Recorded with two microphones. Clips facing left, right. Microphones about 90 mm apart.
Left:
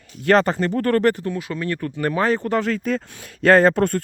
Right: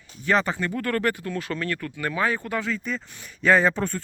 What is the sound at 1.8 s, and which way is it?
Speech, 35° left (ahead or behind).